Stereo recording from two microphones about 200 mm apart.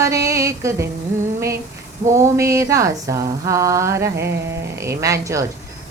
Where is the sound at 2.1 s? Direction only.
15° right (ahead or behind).